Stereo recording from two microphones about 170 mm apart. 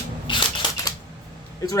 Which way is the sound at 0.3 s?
25° left (ahead or behind).